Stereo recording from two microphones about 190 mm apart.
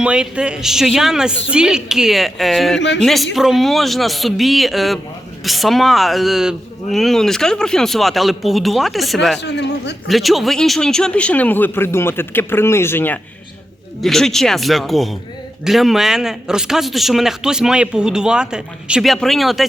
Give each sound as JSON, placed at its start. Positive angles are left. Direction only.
{"t": 0.0, "sound": "a man's voice", "side_deg": -5}
{"t": 9.4, "sound": "speech", "side_deg": 65}
{"t": 10.1, "sound": "a man's voice", "side_deg": 0}